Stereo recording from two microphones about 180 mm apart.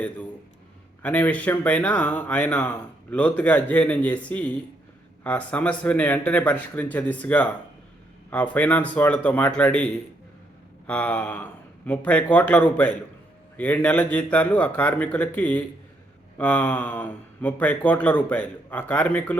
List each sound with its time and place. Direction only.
1.0 s speech: 10° left (ahead or behind)